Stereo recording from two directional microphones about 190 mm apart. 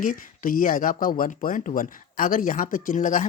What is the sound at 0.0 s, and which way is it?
Speech, 45° left (ahead or behind).